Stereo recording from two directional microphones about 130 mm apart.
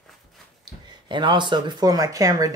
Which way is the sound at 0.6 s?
35° right (ahead or behind).